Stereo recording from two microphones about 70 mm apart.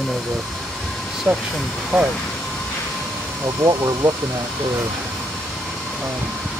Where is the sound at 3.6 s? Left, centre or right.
Right.